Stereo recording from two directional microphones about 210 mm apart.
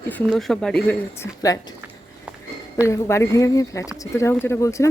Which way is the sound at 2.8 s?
15° left (ahead or behind).